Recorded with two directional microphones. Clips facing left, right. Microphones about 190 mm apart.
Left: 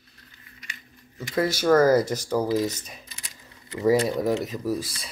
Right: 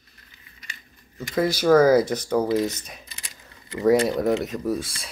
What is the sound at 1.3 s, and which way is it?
Speech, centre (ahead or behind).